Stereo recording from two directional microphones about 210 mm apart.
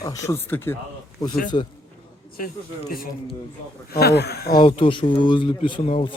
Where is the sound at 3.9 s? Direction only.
50° left (ahead or behind).